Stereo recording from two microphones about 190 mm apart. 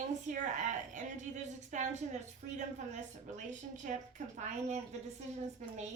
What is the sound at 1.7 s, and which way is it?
A woman's voice, 40° right (ahead or behind).